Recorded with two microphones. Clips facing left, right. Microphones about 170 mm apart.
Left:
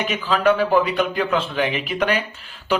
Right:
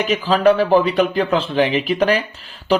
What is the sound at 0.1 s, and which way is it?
Speech, 35° right (ahead or behind).